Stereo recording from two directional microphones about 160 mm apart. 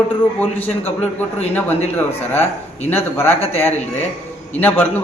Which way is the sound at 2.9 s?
15° left (ahead or behind).